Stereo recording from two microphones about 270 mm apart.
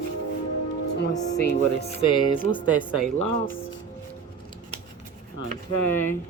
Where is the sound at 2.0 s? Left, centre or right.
Centre.